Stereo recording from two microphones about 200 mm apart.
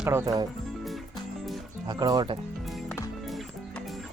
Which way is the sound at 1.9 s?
20° right (ahead or behind).